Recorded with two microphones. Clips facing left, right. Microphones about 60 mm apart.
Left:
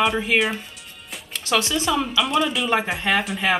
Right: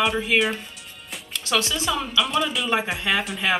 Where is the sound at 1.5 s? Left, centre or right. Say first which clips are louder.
Left 2 dB; centre.